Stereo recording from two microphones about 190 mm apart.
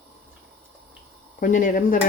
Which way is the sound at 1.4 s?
45° left (ahead or behind).